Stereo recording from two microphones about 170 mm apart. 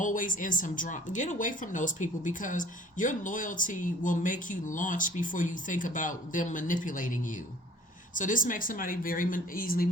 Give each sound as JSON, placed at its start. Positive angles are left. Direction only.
{"t": 0.0, "sound": "a woman's voice", "side_deg": 50}